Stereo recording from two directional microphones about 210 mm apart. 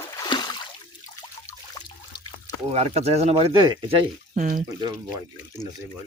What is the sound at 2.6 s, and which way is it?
Speech, 30° right (ahead or behind).